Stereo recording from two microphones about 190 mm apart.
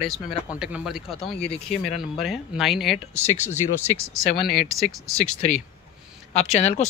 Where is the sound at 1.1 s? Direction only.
30° left (ahead or behind).